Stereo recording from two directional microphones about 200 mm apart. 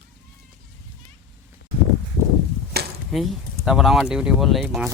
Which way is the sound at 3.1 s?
Centre (ahead or behind).